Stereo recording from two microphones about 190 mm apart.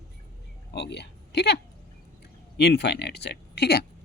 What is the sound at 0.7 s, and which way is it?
Speech, 60° left (ahead or behind).